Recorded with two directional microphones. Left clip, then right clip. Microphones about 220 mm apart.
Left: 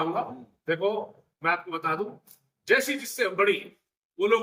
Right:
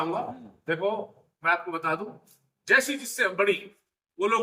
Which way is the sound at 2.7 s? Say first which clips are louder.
Right 1 dB; centre (ahead or behind).